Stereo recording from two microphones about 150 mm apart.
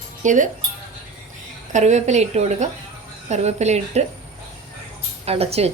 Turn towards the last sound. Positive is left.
turn(degrees=-40)  # may be behind; listen again after turning